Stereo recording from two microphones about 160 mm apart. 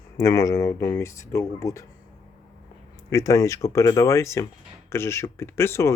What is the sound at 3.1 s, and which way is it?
Speech, 20° left (ahead or behind).